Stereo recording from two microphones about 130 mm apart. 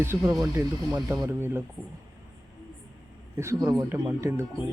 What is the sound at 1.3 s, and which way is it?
Speech, 15° right (ahead or behind).